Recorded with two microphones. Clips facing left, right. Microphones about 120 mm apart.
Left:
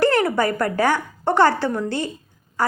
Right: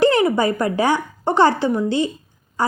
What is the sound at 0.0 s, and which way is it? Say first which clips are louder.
A woman's voice: right 2 dB; 15° right (ahead or behind).